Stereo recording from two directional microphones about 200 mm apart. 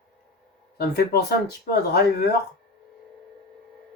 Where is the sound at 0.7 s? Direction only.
50° left (ahead or behind).